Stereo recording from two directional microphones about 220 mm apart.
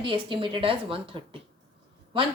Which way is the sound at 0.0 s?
25° right (ahead or behind).